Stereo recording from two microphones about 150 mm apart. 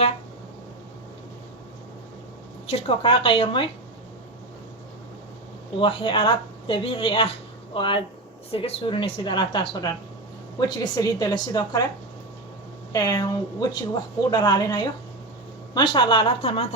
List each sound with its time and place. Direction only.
2.6 s a woman's voice: 40° left (ahead or behind)
5.8 s a woman's voice: 35° left (ahead or behind)
10.9 s a woman's voice: 25° left (ahead or behind)
12.9 s a woman's voice: 25° left (ahead or behind); by 16.6 s 40° left (ahead or behind)